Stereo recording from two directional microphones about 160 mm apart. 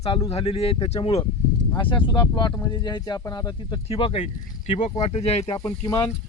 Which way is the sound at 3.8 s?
35° left (ahead or behind).